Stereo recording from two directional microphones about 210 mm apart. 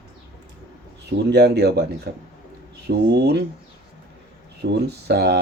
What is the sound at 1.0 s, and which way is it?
Speech, 50° right (ahead or behind).